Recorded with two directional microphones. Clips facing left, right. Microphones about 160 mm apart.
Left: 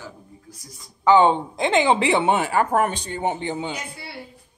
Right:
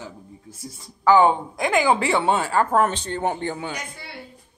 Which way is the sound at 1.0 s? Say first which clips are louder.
Even; 20° left (ahead or behind).